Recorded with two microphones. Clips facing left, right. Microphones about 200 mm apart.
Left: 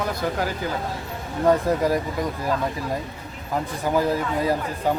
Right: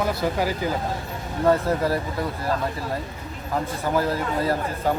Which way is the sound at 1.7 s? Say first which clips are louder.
Left 2 dB; 15° left (ahead or behind).